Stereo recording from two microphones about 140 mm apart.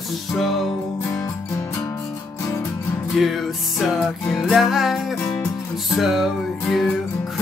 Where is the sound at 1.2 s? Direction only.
25° left (ahead or behind).